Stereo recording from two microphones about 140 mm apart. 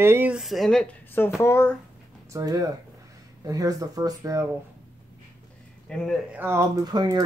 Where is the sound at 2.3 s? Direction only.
25° right (ahead or behind).